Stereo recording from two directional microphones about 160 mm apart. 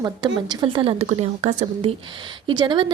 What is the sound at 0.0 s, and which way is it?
Speech, 25° right (ahead or behind).